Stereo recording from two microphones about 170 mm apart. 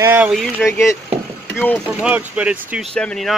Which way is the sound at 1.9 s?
10° right (ahead or behind).